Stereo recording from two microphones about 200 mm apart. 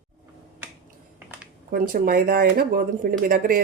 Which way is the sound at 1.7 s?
45° right (ahead or behind).